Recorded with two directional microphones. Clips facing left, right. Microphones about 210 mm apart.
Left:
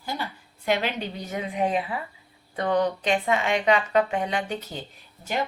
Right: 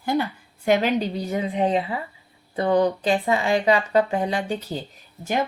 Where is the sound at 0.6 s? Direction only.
45° right (ahead or behind).